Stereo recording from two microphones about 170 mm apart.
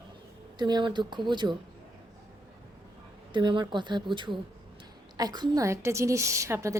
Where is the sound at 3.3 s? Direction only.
30° right (ahead or behind).